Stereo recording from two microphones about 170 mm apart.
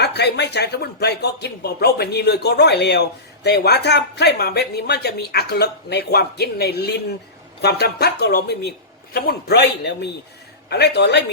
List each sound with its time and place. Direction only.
0.0 s a man's voice: 80° left